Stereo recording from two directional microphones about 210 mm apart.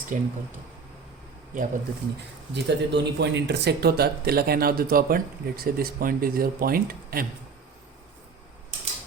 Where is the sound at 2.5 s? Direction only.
55° right (ahead or behind).